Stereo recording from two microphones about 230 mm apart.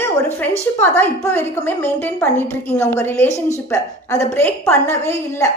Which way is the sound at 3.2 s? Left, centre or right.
Left.